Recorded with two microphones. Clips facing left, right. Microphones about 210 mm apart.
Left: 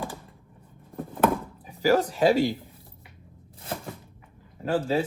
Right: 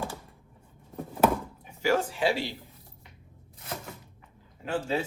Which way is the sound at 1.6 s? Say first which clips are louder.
Left 5 dB; 40° left (ahead or behind).